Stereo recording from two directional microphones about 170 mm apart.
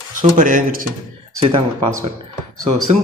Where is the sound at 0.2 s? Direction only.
50° right (ahead or behind).